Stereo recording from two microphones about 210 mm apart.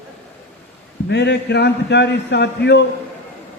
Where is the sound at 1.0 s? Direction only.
55° left (ahead or behind).